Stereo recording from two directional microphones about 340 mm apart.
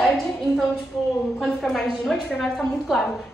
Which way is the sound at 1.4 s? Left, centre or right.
Centre.